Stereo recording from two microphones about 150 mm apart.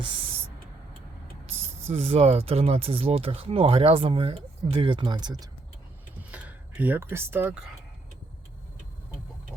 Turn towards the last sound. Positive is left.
turn(degrees=-10)  # may be behind; listen again after turning